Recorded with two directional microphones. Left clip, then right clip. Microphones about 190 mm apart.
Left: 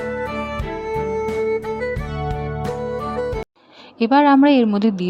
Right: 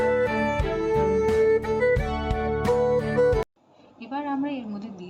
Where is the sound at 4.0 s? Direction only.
55° left (ahead or behind).